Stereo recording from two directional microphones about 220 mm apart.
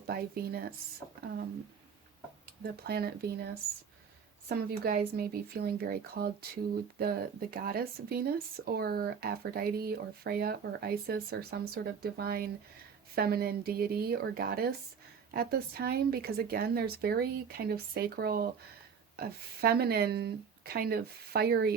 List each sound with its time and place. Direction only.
0.1 s speech: 45° right (ahead or behind)
2.6 s speech: 45° right (ahead or behind)